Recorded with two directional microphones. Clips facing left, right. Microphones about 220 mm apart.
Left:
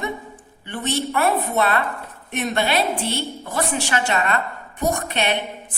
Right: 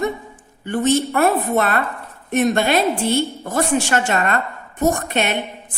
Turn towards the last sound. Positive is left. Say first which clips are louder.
# right 2 dB
turn(degrees=-45)  # may be behind; listen again after turning